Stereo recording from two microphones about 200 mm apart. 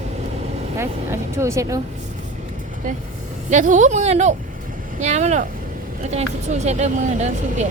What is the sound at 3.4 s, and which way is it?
Speech, 40° right (ahead or behind).